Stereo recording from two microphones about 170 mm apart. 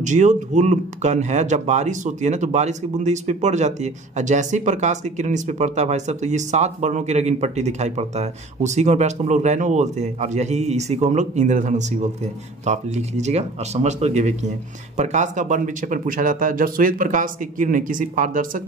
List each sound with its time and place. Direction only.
0.0 s speech: 45° right (ahead or behind)